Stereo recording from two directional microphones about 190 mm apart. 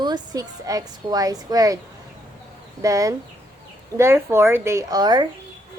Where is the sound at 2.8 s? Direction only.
15° right (ahead or behind).